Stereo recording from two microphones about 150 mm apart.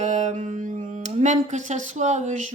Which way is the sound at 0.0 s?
55° right (ahead or behind).